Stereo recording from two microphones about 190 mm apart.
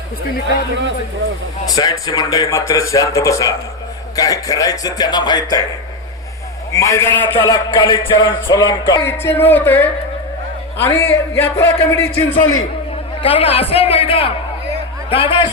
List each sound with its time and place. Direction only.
1.7 s speech: 20° left (ahead or behind)
6.7 s speech: 15° left (ahead or behind)
9.0 s speech: 10° left (ahead or behind)
13.2 s speech: 30° left (ahead or behind)